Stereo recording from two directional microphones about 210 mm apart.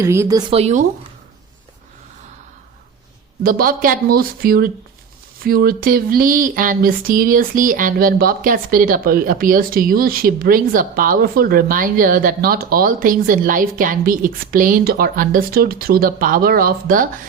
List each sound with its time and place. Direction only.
0.0 s a woman's voice: 15° right (ahead or behind)
0.5 s speech: 35° right (ahead or behind)
3.4 s a sound: 40° right (ahead or behind)